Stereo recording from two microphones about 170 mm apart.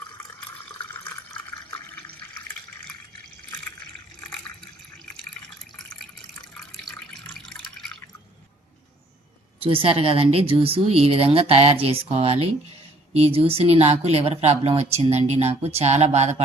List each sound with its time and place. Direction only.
0.9 s water: 10° left (ahead or behind)
6.5 s water: 5° left (ahead or behind)
9.6 s speech: 30° right (ahead or behind)